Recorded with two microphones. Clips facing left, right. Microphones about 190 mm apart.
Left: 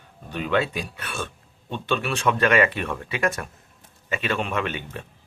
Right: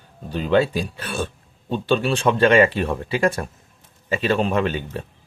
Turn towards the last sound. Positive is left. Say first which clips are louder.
# right 6 dB
turn(degrees=-35)  # may be behind; listen again after turning